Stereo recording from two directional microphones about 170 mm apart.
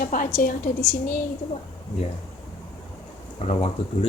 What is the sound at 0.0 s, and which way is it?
Speech, 50° left (ahead or behind).